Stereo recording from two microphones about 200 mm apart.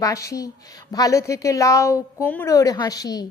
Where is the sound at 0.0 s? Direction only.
15° left (ahead or behind).